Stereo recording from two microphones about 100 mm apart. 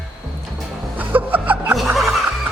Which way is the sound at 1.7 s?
Centre (ahead or behind).